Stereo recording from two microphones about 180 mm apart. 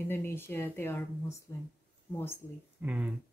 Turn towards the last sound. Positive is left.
turn(degrees=-5)  # may be behind; listen again after turning